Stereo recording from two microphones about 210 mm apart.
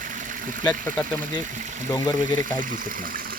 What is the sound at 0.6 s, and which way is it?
Speech, 10° left (ahead or behind).